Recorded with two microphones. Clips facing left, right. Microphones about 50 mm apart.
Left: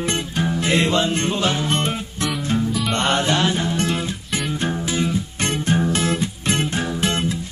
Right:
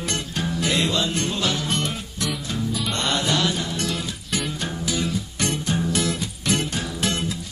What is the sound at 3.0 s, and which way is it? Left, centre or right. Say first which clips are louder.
Mantra: left 3 dB; left.